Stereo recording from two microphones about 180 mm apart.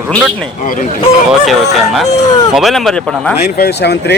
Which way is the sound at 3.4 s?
65° left (ahead or behind).